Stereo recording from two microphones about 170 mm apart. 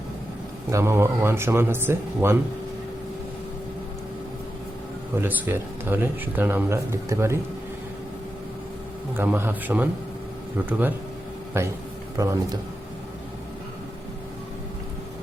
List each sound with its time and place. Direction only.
0.7 s speech: 15° right (ahead or behind)
5.2 s speech: 10° right (ahead or behind)
9.1 s a man's voice: 10° right (ahead or behind)